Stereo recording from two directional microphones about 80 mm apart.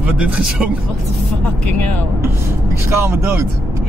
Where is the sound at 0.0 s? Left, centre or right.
Centre.